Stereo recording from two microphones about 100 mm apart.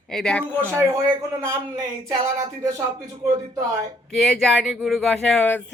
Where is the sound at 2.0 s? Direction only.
35° right (ahead or behind).